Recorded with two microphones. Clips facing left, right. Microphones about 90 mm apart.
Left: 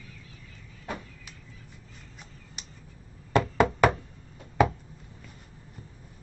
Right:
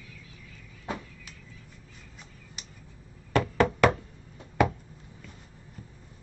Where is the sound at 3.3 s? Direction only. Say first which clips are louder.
Left 1 dB; 15° left (ahead or behind).